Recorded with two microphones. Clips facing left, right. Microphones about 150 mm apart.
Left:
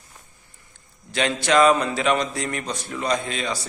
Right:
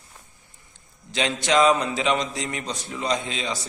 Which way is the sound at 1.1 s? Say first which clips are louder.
Left 2 dB; 20° right (ahead or behind).